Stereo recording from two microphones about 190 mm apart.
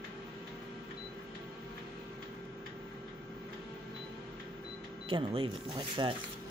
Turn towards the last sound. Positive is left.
turn(degrees=-25)  # may be behind; listen again after turning